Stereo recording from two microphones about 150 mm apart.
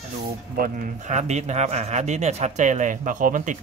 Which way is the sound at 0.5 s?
70° right (ahead or behind).